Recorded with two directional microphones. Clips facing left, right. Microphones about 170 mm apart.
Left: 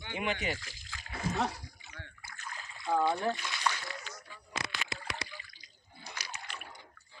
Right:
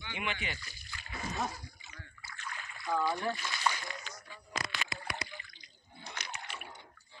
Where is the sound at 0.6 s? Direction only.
90° left.